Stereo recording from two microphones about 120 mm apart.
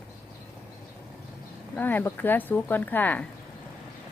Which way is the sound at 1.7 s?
15° left (ahead or behind).